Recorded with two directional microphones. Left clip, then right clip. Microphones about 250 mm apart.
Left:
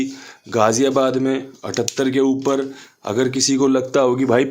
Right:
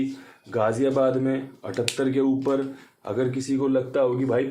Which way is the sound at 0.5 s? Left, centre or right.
Left.